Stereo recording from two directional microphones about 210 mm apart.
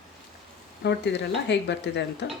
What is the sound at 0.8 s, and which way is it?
Speech, 55° left (ahead or behind).